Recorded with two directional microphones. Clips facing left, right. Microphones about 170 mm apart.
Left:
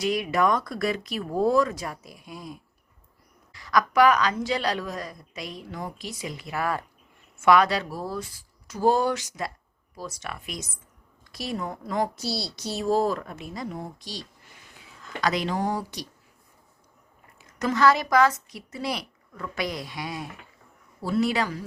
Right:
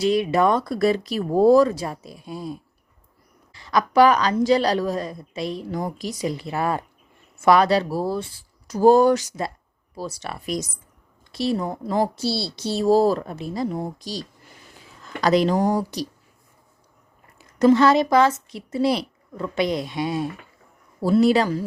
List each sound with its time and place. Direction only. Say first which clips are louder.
0.0 s a woman's voice: right 5 dB; 30° right (ahead or behind)
7.3 s a woman's voice: right 3 dB; 35° right (ahead or behind)
17.3 s speech: right 11 dB; 30° right (ahead or behind)
21.0 s a woman's voice: right 8 dB; 35° right (ahead or behind)